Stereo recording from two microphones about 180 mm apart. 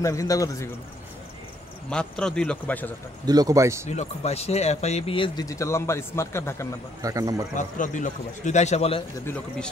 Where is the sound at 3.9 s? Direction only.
40° left (ahead or behind); by 6.7 s 15° left (ahead or behind).